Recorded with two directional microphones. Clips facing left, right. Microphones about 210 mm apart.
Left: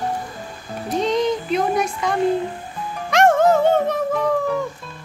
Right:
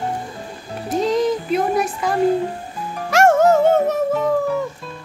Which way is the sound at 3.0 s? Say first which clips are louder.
Right 1 dB; 10° right (ahead or behind).